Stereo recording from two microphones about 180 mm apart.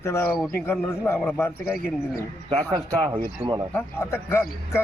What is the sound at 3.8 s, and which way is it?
Speech, 15° left (ahead or behind).